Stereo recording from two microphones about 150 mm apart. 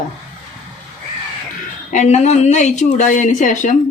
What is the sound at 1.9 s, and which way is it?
Speech, 50° left (ahead or behind).